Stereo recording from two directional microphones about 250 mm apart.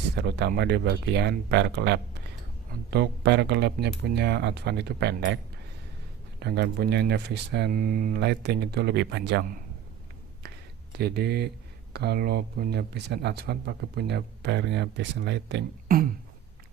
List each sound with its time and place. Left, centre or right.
0.2 s speech: right
6.4 s speech: right
10.9 s speech: right